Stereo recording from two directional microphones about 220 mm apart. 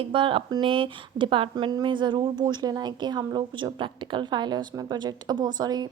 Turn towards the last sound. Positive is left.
turn(degrees=-20)  # may be behind; listen again after turning